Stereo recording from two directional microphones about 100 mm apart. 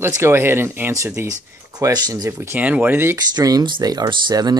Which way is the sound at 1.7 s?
40° right (ahead or behind).